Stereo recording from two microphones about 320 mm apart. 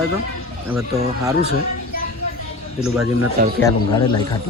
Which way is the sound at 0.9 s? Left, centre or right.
Centre.